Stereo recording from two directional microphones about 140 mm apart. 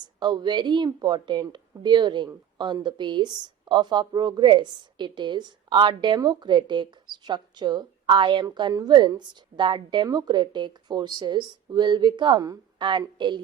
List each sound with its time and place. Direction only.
0.0 s a woman's voice: 30° right (ahead or behind)